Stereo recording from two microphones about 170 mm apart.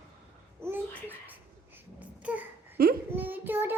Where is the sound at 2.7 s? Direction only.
60° right (ahead or behind).